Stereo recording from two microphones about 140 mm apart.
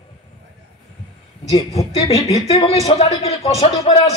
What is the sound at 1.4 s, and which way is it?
A man's voice, 45° left (ahead or behind).